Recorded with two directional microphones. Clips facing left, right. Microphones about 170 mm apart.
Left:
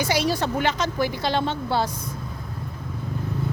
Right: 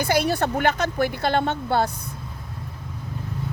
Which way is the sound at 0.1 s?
55° right (ahead or behind).